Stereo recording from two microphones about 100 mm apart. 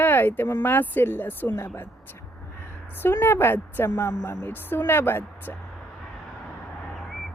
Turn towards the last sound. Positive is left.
turn(degrees=20)  # may be behind; listen again after turning